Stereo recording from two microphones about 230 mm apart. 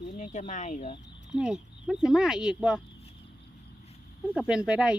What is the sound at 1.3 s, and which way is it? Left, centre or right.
Speech, centre.